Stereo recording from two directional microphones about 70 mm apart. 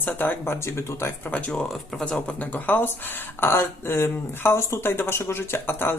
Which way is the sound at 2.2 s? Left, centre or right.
Left.